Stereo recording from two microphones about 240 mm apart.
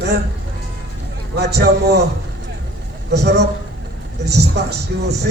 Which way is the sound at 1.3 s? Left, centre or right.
Right.